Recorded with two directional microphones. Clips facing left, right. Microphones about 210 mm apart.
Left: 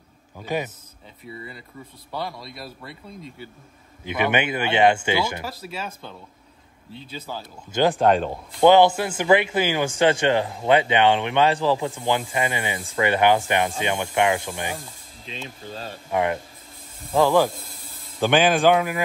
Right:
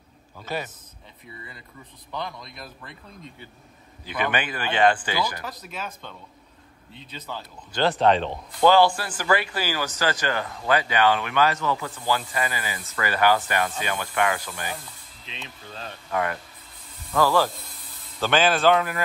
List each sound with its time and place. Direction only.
0.4 s a man's voice: 15° left (ahead or behind)
2.4 s speech: 35° left (ahead or behind)
4.0 s speech: 20° left (ahead or behind)
5.4 s speech: 5° left (ahead or behind)
7.7 s a man's voice: 15° left (ahead or behind)
8.5 s speech: 20° left (ahead or behind)
16.1 s a man's voice: 20° left (ahead or behind)